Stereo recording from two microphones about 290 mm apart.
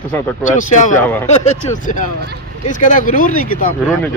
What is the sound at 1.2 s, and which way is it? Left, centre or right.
Speech, left.